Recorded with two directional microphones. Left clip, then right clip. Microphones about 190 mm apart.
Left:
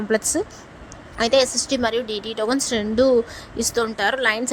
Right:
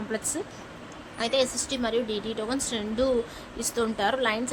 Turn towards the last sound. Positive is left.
turn(degrees=35)  # may be behind; listen again after turning